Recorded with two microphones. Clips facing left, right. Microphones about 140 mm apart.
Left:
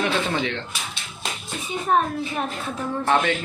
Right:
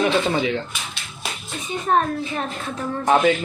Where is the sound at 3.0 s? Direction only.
10° right (ahead or behind).